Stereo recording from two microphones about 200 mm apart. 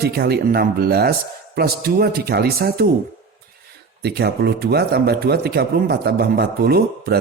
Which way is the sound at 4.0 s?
55° right (ahead or behind).